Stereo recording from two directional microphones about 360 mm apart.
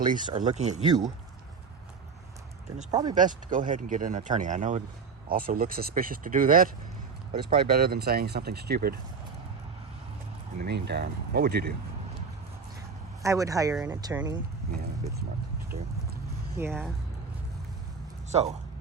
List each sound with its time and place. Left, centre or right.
0.1 s speech: centre
2.7 s speech: centre
3.2 s speech: right
7.7 s speech: right
10.6 s speech: right
13.2 s speech: centre
14.8 s speech: right
16.6 s speech: centre
18.3 s speech: centre